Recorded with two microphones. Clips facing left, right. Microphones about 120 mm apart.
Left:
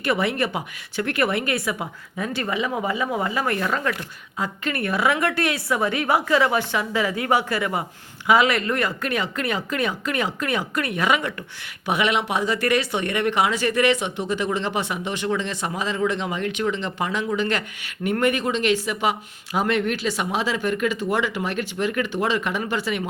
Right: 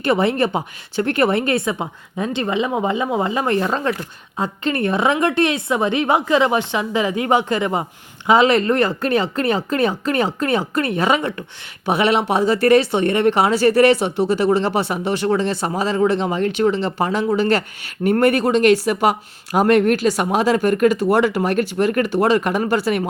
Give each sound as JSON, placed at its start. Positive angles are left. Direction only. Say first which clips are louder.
{"t": 0.0, "sound": "speech", "louder": "right 5 dB", "side_deg": -30}